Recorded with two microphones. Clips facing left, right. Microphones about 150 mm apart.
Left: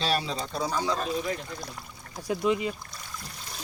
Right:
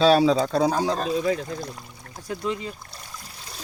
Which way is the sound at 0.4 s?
75° right (ahead or behind).